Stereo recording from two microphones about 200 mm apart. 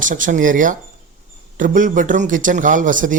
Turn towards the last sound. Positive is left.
turn(degrees=-40)  # may be behind; listen again after turning